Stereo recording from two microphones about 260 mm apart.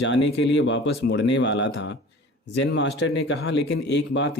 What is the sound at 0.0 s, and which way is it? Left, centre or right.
Speech, left.